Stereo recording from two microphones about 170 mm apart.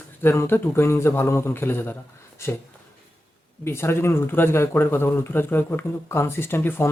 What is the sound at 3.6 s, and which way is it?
Speech, 15° left (ahead or behind).